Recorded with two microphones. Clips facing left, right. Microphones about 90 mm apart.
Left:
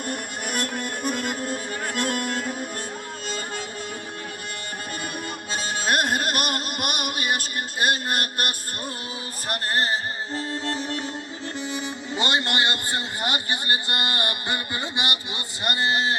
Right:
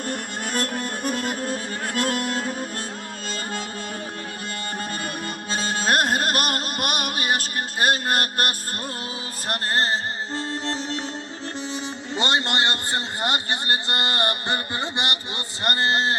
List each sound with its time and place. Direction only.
0.5 s music: 40° right (ahead or behind)
5.5 s music: 35° right (ahead or behind)
10.4 s music: 30° right (ahead or behind)